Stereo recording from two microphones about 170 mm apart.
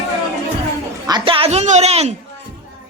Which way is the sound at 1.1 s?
30° right (ahead or behind).